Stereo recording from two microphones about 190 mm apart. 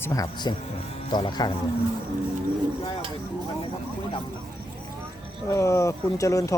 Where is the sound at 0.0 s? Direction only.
15° left (ahead or behind).